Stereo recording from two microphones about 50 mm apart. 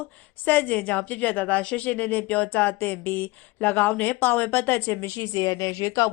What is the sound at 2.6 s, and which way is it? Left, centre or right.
Speech, left.